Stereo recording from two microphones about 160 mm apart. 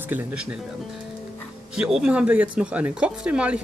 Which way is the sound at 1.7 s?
5° right (ahead or behind).